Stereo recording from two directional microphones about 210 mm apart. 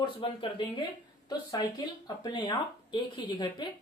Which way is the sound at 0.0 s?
20° left (ahead or behind).